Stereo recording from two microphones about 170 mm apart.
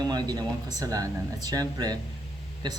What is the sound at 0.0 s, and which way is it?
Speech, 25° right (ahead or behind).